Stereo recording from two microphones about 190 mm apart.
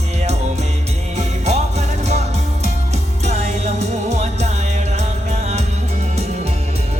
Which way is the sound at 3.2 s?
35° right (ahead or behind).